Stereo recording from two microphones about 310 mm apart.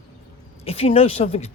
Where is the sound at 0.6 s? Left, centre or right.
Centre.